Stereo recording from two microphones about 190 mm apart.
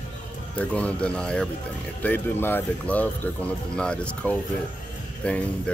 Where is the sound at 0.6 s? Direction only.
5° left (ahead or behind).